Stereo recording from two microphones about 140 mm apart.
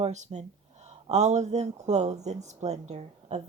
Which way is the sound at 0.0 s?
55° right (ahead or behind).